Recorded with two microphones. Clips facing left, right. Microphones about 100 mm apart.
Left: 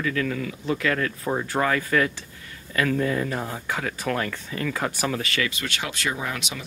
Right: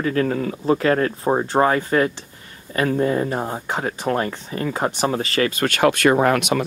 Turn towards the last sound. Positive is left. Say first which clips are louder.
# right 14 dB
turn(degrees=-55)  # may be behind; listen again after turning